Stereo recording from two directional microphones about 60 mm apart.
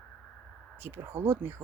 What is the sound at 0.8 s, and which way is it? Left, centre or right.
Speech, right.